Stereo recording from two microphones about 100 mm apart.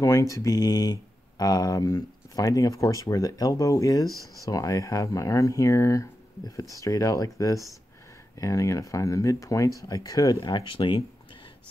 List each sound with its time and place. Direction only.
0.0 s speech: 35° left (ahead or behind); by 11.1 s 60° left (ahead or behind)